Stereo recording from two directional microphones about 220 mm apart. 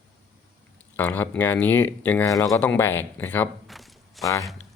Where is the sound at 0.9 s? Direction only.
5° left (ahead or behind).